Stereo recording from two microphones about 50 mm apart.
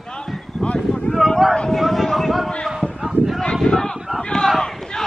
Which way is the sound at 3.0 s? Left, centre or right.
Centre.